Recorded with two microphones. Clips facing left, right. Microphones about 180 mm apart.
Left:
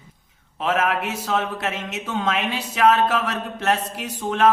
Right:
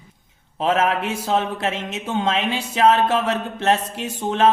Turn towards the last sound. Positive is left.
turn(degrees=-25)  # may be behind; listen again after turning